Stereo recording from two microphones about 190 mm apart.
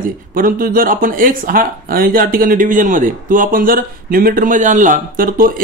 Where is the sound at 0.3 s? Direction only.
50° right (ahead or behind).